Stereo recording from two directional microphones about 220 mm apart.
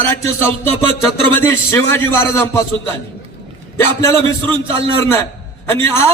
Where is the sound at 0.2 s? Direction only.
10° left (ahead or behind).